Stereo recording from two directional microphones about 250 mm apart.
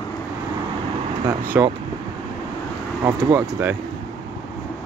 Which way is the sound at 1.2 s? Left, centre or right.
Centre.